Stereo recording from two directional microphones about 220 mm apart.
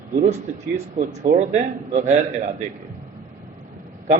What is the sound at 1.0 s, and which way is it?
A man's voice, 35° right (ahead or behind).